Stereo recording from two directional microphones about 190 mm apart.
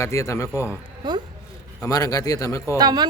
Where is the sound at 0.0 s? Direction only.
15° left (ahead or behind).